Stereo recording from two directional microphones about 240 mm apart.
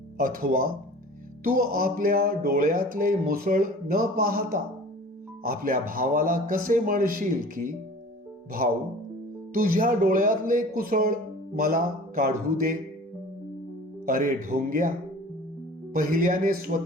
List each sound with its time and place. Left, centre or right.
0.2 s speech: right
9.5 s speech: right
14.0 s speech: right
15.9 s speech: right